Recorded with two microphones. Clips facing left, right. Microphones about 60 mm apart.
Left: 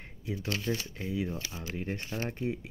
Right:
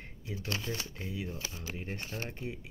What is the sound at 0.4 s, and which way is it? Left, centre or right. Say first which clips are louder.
Speech: left 3 dB; left.